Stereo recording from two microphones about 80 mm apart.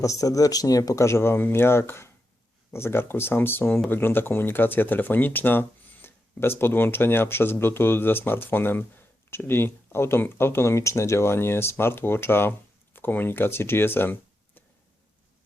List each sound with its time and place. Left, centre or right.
0.0 s speech: left